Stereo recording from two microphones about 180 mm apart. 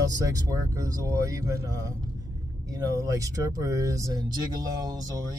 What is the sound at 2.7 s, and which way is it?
Speech, 20° right (ahead or behind).